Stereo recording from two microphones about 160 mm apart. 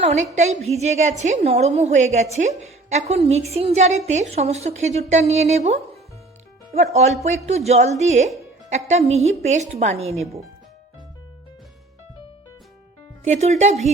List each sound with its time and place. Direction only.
0.0 s a woman's voice: 45° right (ahead or behind)
6.9 s a woman's voice: 45° right (ahead or behind)
13.2 s a woman's voice: 45° right (ahead or behind)